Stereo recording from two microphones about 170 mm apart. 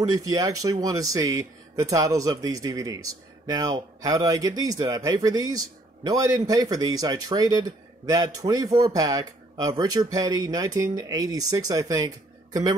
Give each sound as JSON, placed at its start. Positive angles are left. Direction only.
{"t": 0.0, "sound": "speech", "side_deg": -20}